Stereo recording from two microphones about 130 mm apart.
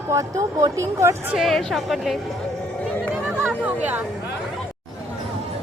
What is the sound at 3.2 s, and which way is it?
Chatter, 10° right (ahead or behind).